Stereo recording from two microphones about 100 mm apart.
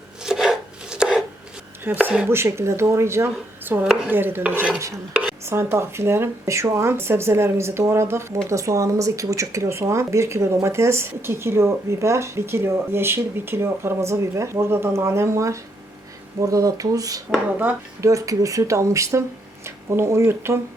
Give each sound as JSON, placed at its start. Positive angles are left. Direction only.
{"t": 0.2, "sound": "chopping", "side_deg": -5}
{"t": 1.8, "sound": "speech", "side_deg": -20}
{"t": 17.3, "sound": "speech", "side_deg": -20}
{"t": 18.0, "sound": "speech", "side_deg": -35}